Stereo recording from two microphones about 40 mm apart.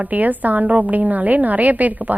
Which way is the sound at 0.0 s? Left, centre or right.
Right.